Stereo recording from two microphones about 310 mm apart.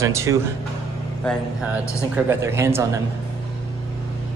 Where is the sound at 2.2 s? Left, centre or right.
Centre.